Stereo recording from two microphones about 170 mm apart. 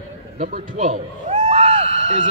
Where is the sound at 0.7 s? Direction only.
45° right (ahead or behind).